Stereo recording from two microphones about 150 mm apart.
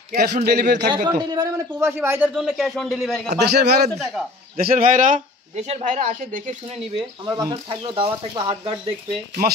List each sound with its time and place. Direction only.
0.1 s a man's voice: 70° right (ahead or behind); by 0.8 s 90° right
0.8 s a man's voice: 30° right (ahead or behind); by 2.4 s 15° right (ahead or behind)
2.4 s a man's voice: centre (ahead or behind)
3.3 s a man's voice: 90° right
3.9 s a man's voice: centre (ahead or behind)
4.6 s speech: 70° right (ahead or behind)
7.2 s speech: 25° right (ahead or behind)
7.5 s speech: 35° right (ahead or behind)